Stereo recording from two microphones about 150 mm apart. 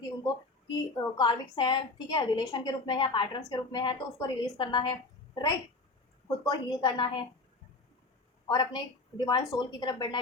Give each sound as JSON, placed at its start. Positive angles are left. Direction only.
{"t": 0.9, "sound": "a woman's voice", "side_deg": 30}
{"t": 8.4, "sound": "a woman's voice", "side_deg": 30}